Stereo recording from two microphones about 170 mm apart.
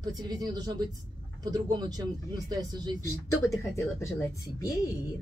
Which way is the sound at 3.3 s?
15° left (ahead or behind).